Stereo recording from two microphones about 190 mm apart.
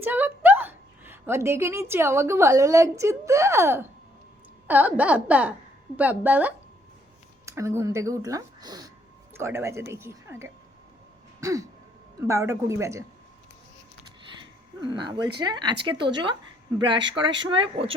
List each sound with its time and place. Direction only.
0.0 s a woman's voice: 10° right (ahead or behind)
11.3 s throat clearing: 15° right (ahead or behind)
12.2 s speech: 15° right (ahead or behind)
14.8 s speech: 25° right (ahead or behind)